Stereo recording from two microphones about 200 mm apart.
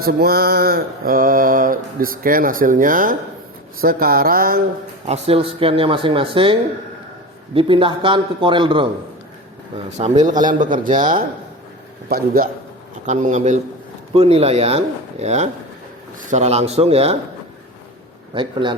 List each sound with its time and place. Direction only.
0.0 s mantra: 50° right (ahead or behind)
5.0 s speech: 30° right (ahead or behind)
10.0 s speech: 35° right (ahead or behind)
12.0 s mantra: 50° right (ahead or behind)
13.1 s speech: 40° right (ahead or behind)
18.3 s speech: 25° right (ahead or behind)